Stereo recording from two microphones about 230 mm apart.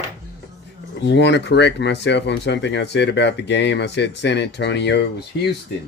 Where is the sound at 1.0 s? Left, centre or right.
Left.